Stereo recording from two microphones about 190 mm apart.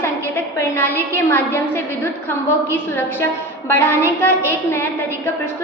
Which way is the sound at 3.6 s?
15° left (ahead or behind).